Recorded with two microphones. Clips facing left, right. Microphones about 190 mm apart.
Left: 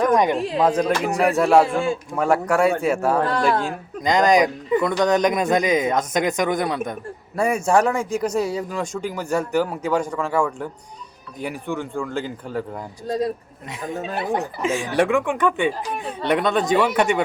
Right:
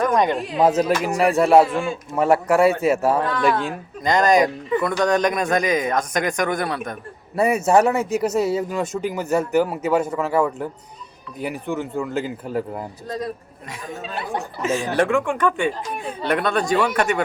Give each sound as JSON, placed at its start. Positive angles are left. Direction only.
{"t": 0.2, "sound": "speech", "side_deg": 10}
{"t": 0.6, "sound": "speech", "side_deg": -5}
{"t": 3.2, "sound": "speech", "side_deg": 40}
{"t": 4.0, "sound": "speech", "side_deg": 15}
{"t": 7.3, "sound": "speech", "side_deg": -5}
{"t": 13.1, "sound": "speech", "side_deg": 30}
{"t": 14.2, "sound": "speech", "side_deg": 15}